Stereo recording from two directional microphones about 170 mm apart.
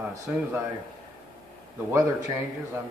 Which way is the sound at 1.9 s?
20° right (ahead or behind).